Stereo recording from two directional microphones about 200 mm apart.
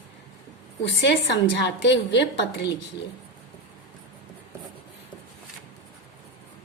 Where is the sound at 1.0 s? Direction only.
60° left (ahead or behind).